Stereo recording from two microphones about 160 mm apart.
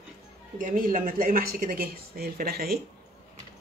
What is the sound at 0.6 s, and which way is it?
A woman's voice, 60° right (ahead or behind).